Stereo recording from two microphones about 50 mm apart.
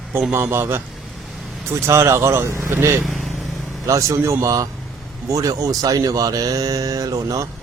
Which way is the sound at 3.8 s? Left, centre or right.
Right.